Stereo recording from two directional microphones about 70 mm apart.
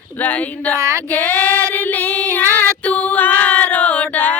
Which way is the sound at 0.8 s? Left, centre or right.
Right.